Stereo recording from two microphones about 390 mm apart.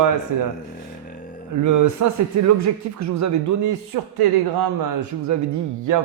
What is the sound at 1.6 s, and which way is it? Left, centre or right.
Speech, right.